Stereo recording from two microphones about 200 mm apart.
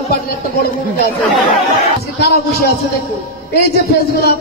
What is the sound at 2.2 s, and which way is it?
Speech, 50° left (ahead or behind).